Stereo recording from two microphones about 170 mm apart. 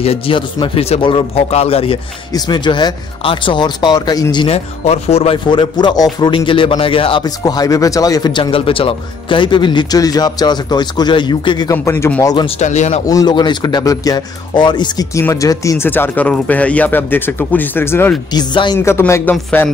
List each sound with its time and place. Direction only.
0.0 s speech: 35° left (ahead or behind)
2.3 s speech: 25° left (ahead or behind)
4.5 s speech: 40° left (ahead or behind); by 12.4 s 20° left (ahead or behind)
12.4 s speech: 40° left (ahead or behind)
13.0 s a man's voice: 20° left (ahead or behind)
18.3 s speech: 25° left (ahead or behind)
18.9 s a man's voice: 15° left (ahead or behind)